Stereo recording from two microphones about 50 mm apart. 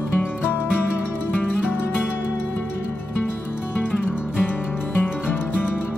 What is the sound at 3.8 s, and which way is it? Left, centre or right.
Music, left.